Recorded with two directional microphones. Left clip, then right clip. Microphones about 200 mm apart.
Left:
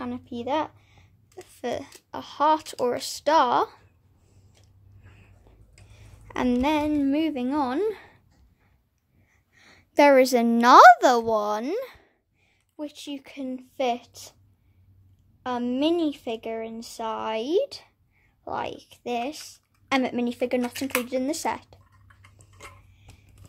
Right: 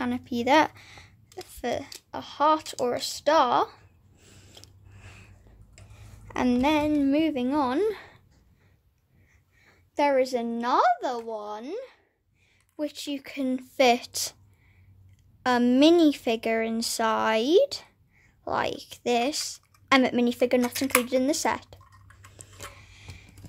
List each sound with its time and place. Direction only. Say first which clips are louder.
0.0 s a child's voice: right 4 dB; 15° right (ahead or behind)
1.3 s speech: even; 5° right (ahead or behind)
6.2 s speech: even; centre (ahead or behind)
9.6 s a woman's voice: left 7 dB; 30° left (ahead or behind)
12.7 s speech: right 4 dB; 10° right (ahead or behind)
15.4 s speech: right 5 dB; 25° right (ahead or behind); by 21.7 s 10° right (ahead or behind)
22.4 s a sound: right 3 dB; 25° right (ahead or behind)